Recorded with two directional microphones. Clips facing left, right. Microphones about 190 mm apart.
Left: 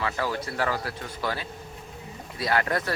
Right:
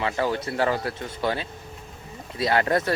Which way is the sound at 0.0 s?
25° right (ahead or behind).